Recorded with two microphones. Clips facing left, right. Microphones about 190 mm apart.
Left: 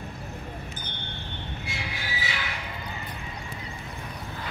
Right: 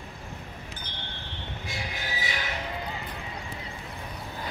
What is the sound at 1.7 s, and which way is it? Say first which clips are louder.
Train: right 2 dB; 40° right (ahead or behind).